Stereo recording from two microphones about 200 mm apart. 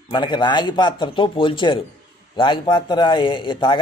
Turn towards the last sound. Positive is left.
turn(degrees=25)  # may be behind; listen again after turning